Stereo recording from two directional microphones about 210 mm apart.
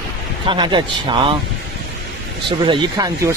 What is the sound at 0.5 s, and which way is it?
Speech, 20° right (ahead or behind).